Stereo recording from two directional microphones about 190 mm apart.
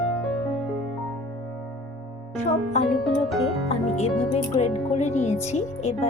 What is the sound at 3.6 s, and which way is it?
Music, 35° left (ahead or behind).